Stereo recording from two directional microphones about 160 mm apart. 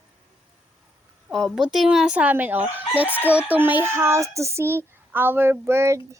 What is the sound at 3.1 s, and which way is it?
Chicken, 10° left (ahead or behind).